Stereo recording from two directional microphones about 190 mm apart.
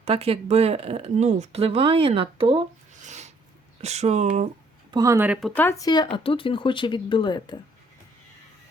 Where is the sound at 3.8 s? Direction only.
35° right (ahead or behind).